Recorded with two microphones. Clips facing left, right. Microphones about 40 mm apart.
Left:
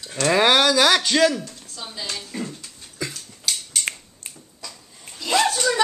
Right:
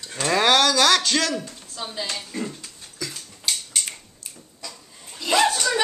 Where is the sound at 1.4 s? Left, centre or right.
Centre.